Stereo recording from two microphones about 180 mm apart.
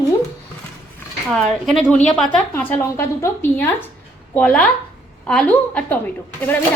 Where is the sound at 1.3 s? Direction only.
Centre (ahead or behind).